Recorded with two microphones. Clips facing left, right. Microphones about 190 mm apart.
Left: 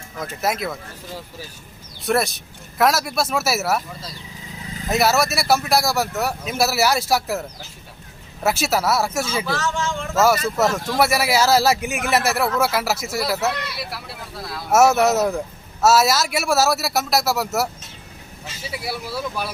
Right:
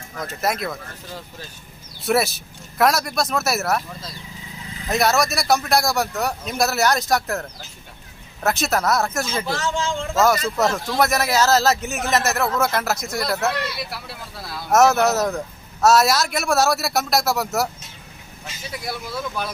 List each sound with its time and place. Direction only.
0.2 s speech: centre (ahead or behind)
8.4 s speech: 5° left (ahead or behind)
9.5 s a man's voice: 25° right (ahead or behind)
10.6 s speech: 5° left (ahead or behind)